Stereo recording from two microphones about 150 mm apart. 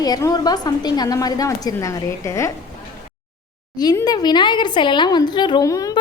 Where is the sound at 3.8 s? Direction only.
25° left (ahead or behind).